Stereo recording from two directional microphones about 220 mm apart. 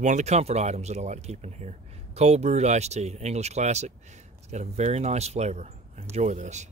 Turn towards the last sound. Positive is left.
turn(degrees=-30)  # may be behind; listen again after turning